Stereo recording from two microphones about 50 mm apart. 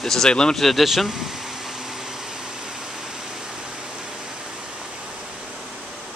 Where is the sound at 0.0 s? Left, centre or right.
Centre.